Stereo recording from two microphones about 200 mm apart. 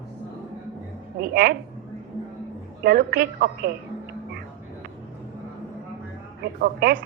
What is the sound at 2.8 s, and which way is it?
Speech, 50° right (ahead or behind).